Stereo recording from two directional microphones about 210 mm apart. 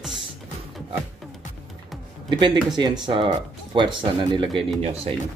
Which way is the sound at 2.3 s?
20° right (ahead or behind).